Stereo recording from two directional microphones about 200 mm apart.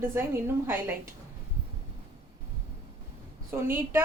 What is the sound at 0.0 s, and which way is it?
Speech, 10° right (ahead or behind).